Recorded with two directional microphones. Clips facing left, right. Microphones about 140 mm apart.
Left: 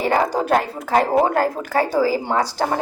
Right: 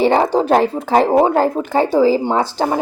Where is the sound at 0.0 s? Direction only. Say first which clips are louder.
Right 5 dB; 25° right (ahead or behind).